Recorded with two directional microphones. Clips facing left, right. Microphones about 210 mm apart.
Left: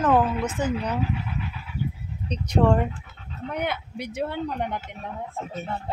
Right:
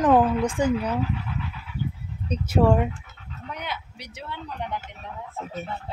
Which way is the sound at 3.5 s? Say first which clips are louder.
Left 6 dB; 55° left (ahead or behind).